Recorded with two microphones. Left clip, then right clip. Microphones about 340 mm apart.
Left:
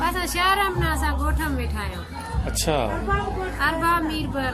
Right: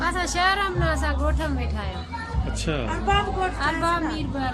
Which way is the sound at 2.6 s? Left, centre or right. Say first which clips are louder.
Left 6 dB; centre.